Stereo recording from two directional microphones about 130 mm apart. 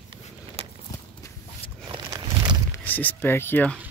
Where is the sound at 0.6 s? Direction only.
50° right (ahead or behind).